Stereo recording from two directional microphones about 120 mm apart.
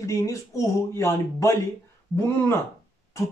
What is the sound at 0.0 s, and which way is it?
Speech, 25° left (ahead or behind).